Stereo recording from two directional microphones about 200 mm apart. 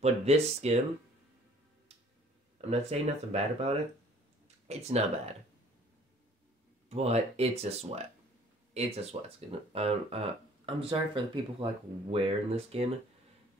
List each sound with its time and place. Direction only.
0.0 s speech: 30° right (ahead or behind)
2.7 s speech: 30° right (ahead or behind)
6.9 s speech: 30° right (ahead or behind)